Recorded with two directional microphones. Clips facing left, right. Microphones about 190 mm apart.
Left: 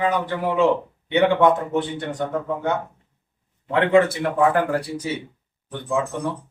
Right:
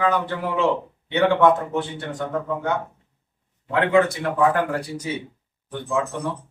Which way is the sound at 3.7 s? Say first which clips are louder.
Left 2 dB; 30° left (ahead or behind).